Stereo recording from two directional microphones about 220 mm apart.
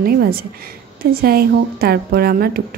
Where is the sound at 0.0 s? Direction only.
45° right (ahead or behind).